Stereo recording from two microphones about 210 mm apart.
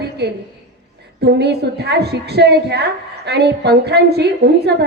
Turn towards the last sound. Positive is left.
turn(degrees=-50)  # may be behind; listen again after turning